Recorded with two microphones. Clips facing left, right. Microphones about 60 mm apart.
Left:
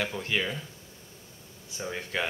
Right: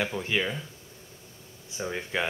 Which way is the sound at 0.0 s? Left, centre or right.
Centre.